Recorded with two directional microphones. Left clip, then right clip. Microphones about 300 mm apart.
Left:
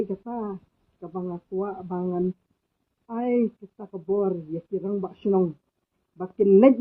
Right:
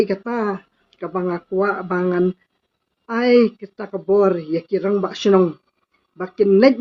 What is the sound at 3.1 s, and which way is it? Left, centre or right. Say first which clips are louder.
Speech: right 11 dB; right.